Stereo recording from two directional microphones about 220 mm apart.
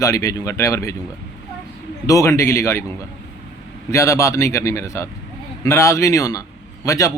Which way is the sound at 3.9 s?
15° left (ahead or behind).